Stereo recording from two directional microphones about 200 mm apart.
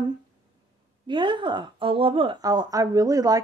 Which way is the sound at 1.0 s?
25° right (ahead or behind).